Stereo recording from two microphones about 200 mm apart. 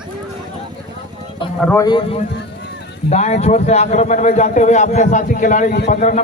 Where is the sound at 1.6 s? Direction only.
10° left (ahead or behind).